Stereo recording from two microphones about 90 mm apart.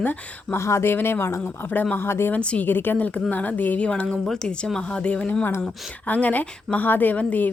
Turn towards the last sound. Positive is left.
turn(degrees=20)  # may be behind; listen again after turning